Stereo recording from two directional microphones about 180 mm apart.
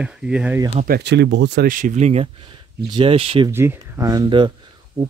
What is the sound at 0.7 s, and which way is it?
Speech, 50° right (ahead or behind).